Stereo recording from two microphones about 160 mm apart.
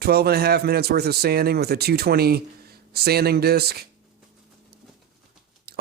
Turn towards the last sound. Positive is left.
turn(degrees=-80)